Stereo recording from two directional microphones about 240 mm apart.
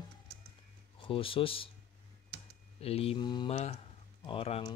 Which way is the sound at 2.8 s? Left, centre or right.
Left.